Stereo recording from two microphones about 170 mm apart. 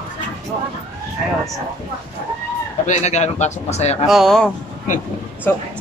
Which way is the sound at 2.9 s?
40° left (ahead or behind).